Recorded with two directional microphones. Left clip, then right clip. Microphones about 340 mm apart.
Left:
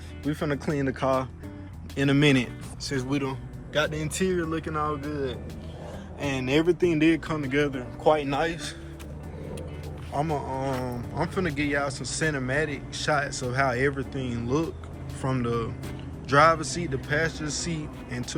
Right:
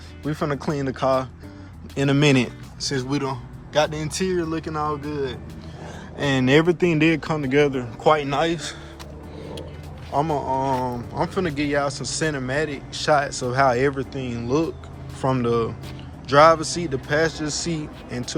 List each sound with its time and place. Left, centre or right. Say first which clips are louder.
0.3 s a man's voice: right 3 dB; centre
10.2 s speech: right 7 dB; centre